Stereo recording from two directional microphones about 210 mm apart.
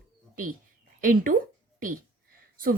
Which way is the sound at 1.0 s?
40° right (ahead or behind).